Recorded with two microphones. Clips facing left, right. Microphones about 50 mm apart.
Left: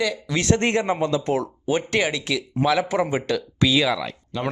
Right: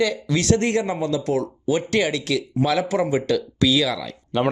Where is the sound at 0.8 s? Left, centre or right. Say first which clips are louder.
Left 1 dB; left.